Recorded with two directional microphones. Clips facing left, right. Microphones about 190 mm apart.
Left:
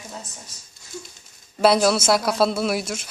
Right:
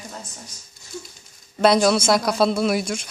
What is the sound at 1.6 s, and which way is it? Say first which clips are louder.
Speech: right 1 dB; 5° left (ahead or behind).